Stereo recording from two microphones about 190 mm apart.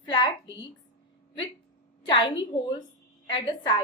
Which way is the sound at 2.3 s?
25° left (ahead or behind).